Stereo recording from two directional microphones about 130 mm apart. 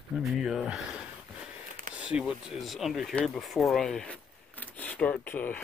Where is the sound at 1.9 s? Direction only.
10° right (ahead or behind); by 5.6 s 15° left (ahead or behind).